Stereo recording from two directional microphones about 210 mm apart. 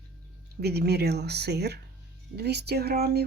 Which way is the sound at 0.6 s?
50° right (ahead or behind).